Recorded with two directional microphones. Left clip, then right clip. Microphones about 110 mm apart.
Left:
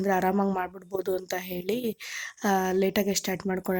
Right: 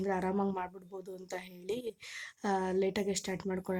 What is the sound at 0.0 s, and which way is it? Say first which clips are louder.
Speech: left 8 dB; 40° left (ahead or behind).